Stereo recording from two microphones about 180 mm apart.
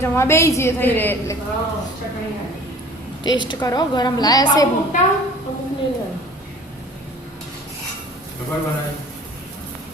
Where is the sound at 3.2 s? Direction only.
25° left (ahead or behind).